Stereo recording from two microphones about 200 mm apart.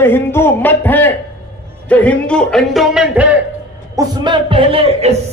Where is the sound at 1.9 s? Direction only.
5° left (ahead or behind).